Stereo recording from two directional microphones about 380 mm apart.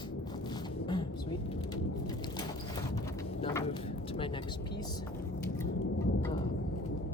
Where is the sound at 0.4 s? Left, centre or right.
Centre.